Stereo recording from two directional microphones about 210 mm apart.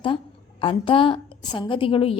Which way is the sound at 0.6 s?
25° left (ahead or behind).